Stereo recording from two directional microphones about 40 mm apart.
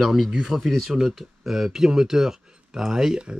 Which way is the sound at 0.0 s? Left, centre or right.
Centre.